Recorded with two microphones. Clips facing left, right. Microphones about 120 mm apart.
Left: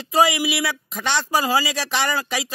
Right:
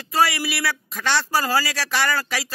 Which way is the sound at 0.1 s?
15° left (ahead or behind).